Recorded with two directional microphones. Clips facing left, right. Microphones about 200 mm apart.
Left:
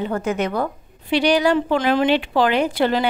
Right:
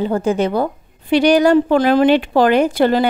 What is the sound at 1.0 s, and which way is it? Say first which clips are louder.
A woman's voice: right 5 dB; 45° right (ahead or behind).